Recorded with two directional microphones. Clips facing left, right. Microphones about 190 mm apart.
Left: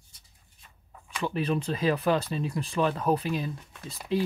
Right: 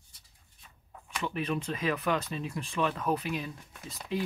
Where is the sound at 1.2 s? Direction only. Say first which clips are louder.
Left 4 dB; 35° left (ahead or behind).